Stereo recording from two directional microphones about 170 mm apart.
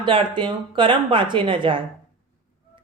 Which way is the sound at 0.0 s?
30° right (ahead or behind).